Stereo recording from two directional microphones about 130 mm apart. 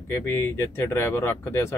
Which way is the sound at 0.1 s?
15° left (ahead or behind).